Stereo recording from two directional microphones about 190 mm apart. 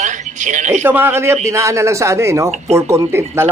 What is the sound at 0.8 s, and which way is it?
A man's voice, 10° right (ahead or behind).